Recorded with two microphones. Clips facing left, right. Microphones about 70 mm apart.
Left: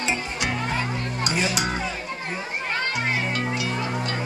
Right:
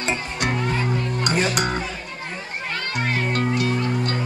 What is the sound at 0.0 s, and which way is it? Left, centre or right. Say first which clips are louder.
Music: right 2 dB; right.